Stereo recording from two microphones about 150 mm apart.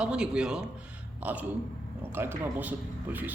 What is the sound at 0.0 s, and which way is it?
A man's voice, 5° right (ahead or behind).